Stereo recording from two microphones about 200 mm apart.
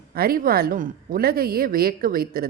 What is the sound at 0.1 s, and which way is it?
Speech, 50° right (ahead or behind).